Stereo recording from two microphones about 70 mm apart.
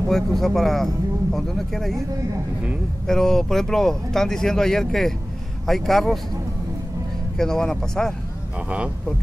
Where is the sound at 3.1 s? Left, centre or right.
Centre.